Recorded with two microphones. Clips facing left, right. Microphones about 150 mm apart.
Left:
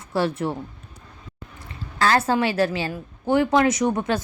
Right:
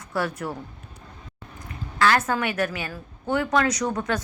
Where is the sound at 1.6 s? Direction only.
30° left (ahead or behind).